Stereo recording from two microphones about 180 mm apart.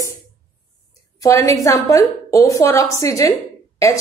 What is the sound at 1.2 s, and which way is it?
A woman's voice, 15° left (ahead or behind).